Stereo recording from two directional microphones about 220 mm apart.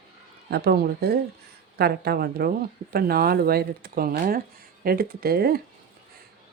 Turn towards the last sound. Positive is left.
turn(degrees=-45)  # may be behind; listen again after turning